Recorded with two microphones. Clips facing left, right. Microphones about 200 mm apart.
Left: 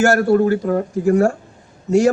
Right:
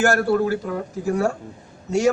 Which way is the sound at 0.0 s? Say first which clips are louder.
Left 5 dB; 45° left (ahead or behind).